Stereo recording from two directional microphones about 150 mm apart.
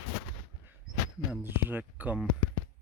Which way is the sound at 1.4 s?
15° right (ahead or behind).